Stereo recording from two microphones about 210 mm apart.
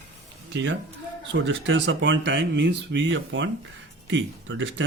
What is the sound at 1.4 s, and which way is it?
Speech, 60° right (ahead or behind).